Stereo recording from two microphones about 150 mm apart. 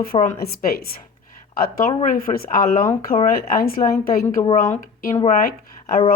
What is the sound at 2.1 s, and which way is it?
Speech, 70° left (ahead or behind).